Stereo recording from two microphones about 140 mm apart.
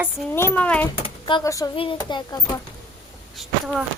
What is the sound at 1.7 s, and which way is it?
Speech, 40° left (ahead or behind).